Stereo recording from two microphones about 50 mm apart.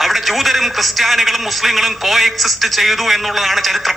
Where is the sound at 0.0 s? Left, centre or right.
Centre.